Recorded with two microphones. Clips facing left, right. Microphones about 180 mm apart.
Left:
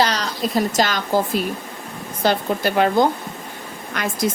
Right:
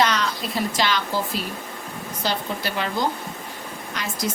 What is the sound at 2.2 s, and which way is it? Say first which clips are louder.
A woman's voice: left 8 dB; 50° left (ahead or behind).